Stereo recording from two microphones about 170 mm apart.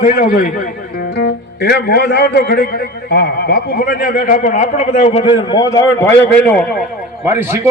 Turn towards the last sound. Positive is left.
turn(degrees=-15)  # may be behind; listen again after turning